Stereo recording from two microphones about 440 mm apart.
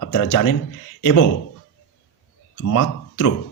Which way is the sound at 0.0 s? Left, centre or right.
Left.